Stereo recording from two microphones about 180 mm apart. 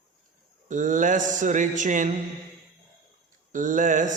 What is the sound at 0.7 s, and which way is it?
A man's voice, 45° right (ahead or behind).